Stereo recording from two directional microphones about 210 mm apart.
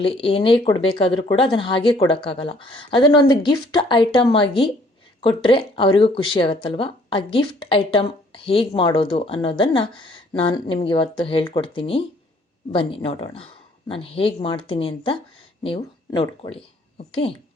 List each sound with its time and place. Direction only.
0.0 s speech: 25° left (ahead or behind)